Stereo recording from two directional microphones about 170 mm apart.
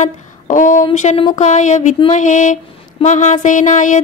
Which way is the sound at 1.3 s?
45° left (ahead or behind).